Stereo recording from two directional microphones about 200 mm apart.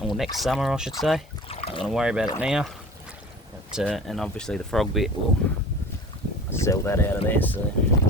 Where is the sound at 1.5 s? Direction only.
30° left (ahead or behind).